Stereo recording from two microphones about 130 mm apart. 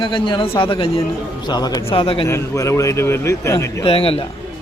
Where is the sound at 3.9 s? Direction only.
50° left (ahead or behind).